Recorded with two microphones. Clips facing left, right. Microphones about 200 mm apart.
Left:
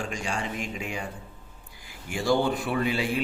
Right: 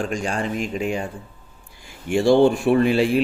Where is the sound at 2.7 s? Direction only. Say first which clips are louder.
Right 10 dB; 60° right (ahead or behind).